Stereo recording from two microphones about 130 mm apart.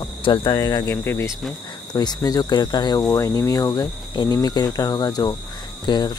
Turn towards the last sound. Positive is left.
turn(degrees=35)  # may be behind; listen again after turning